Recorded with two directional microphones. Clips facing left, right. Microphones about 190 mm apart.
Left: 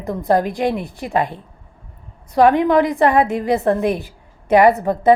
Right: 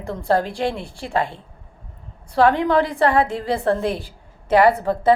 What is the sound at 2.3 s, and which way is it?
A woman's voice, 20° left (ahead or behind).